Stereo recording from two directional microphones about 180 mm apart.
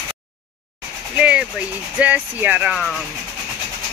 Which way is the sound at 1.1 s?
5° right (ahead or behind).